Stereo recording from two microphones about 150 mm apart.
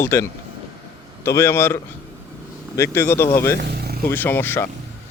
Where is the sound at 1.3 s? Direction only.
20° left (ahead or behind).